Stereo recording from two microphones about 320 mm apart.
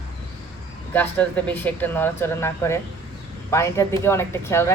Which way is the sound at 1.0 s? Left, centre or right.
Centre.